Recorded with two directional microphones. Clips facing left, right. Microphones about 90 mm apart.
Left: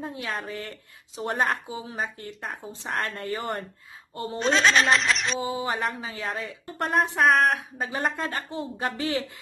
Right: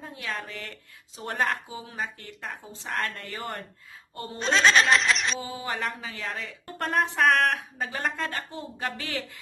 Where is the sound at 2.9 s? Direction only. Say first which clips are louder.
Left 2 dB; 30° left (ahead or behind).